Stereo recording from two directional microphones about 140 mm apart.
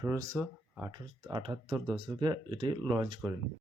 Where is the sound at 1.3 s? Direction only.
35° right (ahead or behind).